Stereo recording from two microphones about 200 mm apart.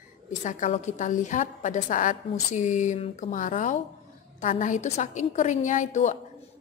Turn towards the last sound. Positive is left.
turn(degrees=35)  # may be behind; listen again after turning